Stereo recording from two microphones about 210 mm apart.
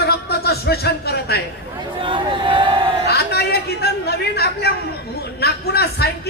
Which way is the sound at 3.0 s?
50° left (ahead or behind).